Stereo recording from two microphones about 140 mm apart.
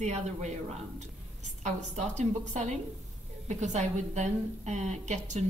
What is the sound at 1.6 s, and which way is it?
A woman's voice, 55° right (ahead or behind).